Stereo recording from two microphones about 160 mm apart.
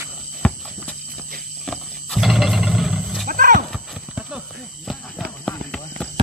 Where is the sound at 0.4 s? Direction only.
10° left (ahead or behind).